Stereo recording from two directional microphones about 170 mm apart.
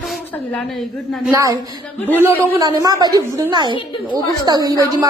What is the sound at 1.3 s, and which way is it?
A woman's voice, 20° right (ahead or behind).